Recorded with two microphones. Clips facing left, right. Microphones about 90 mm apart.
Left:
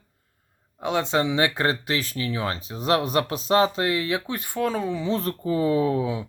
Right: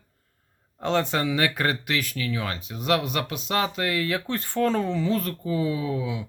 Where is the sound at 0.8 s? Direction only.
15° left (ahead or behind).